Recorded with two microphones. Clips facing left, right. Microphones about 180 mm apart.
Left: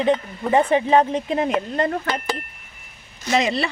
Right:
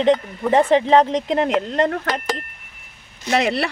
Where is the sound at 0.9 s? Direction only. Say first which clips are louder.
Right 2 dB; 80° right.